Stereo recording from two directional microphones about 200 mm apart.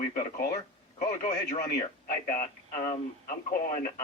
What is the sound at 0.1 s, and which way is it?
A man's voice, 45° left (ahead or behind).